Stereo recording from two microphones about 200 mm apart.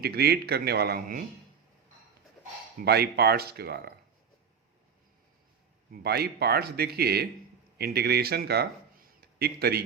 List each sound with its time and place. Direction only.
0.0 s speech: 50° right (ahead or behind)
2.8 s speech: 55° right (ahead or behind)
5.9 s a man's voice: 50° right (ahead or behind)